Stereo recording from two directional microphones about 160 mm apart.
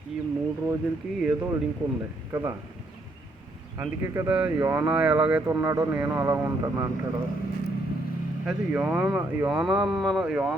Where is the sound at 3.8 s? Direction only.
15° right (ahead or behind).